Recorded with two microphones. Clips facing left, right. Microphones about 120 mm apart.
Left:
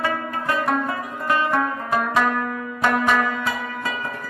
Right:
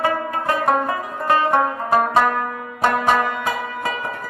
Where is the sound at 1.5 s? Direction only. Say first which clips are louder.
Right 4 dB; 30° right (ahead or behind).